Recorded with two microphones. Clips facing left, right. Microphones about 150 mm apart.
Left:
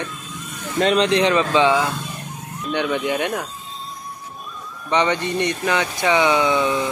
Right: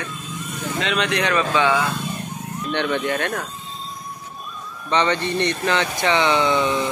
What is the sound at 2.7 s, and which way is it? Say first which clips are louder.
Speech: left 1 dB; 10° left (ahead or behind).